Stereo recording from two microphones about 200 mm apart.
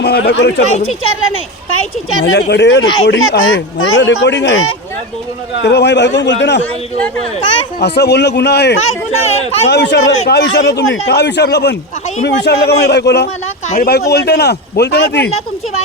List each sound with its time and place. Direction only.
0.0 s a man's voice: 55° left (ahead or behind)
0.9 s speech: 90° left
2.3 s a man's voice: 60° left (ahead or behind)
3.1 s speech: 85° left; by 4.7 s 70° left (ahead or behind)
5.6 s a man's voice: 60° left (ahead or behind)
7.8 s a man's voice: 55° left (ahead or behind)
9.2 s speech: 30° left (ahead or behind)
9.6 s a man's voice: 55° left (ahead or behind)